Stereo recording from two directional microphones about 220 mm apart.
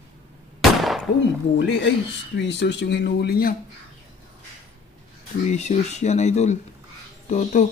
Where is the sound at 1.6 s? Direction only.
55° left (ahead or behind).